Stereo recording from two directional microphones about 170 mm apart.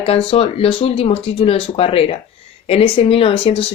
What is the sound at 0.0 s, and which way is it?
Speech, 35° left (ahead or behind).